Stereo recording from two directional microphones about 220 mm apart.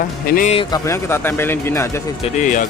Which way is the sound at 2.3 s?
35° left (ahead or behind).